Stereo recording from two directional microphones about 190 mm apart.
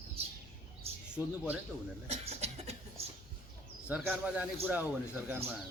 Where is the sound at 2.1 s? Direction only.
35° right (ahead or behind).